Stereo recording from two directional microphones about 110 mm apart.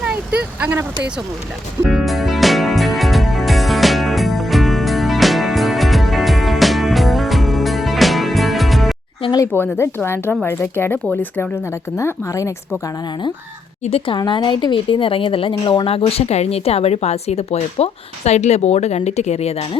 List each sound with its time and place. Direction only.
0.0 s speech: 10° right (ahead or behind)
1.9 s music: centre (ahead or behind)
9.5 s speech: 20° left (ahead or behind)
14.0 s a woman's voice: 50° left (ahead or behind); by 19.6 s 75° left (ahead or behind)